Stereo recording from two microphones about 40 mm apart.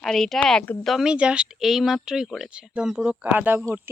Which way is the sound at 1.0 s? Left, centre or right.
Right.